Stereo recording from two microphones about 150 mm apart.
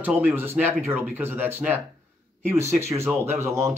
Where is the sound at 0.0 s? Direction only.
10° right (ahead or behind).